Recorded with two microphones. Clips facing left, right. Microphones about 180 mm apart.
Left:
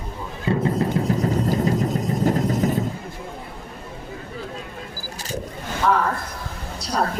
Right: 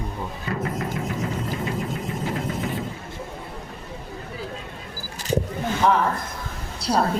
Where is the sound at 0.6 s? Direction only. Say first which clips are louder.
Left 5 dB; 30° left (ahead or behind).